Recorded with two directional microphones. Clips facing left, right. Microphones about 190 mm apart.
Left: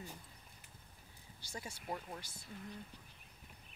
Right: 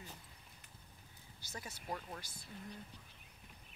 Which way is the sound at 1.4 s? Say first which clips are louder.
Left 2 dB; 30° left (ahead or behind).